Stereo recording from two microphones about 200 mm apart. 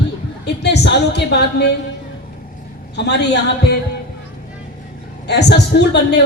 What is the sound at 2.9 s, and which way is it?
Speech, 60° left (ahead or behind).